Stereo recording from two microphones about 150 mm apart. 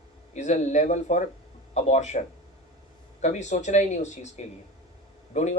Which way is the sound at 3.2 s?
50° left (ahead or behind).